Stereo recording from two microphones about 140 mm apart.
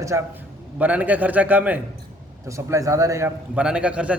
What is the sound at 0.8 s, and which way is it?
A man's voice, 10° right (ahead or behind).